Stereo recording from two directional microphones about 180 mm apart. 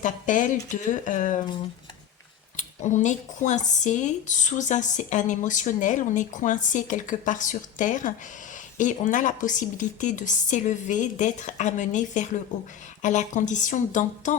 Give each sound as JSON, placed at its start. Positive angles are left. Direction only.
{"t": 0.0, "sound": "speech", "side_deg": 45}
{"t": 2.6, "sound": "speech", "side_deg": 40}